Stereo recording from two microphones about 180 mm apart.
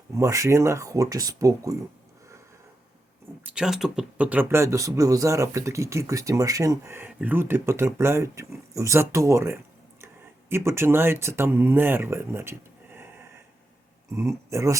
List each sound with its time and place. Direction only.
0.1 s speech: 15° right (ahead or behind)
3.4 s speech: 5° right (ahead or behind)